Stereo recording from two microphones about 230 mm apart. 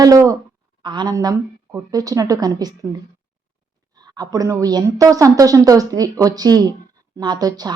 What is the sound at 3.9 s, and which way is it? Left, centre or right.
A woman's voice, centre.